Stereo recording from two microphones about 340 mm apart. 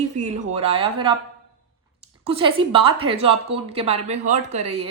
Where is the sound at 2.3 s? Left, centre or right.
Centre.